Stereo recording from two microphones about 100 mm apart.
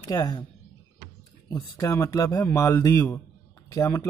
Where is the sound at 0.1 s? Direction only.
35° left (ahead or behind).